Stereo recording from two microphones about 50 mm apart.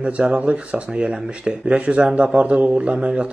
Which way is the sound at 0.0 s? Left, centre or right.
Right.